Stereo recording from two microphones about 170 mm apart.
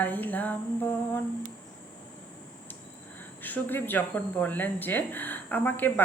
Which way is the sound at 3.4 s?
10° left (ahead or behind).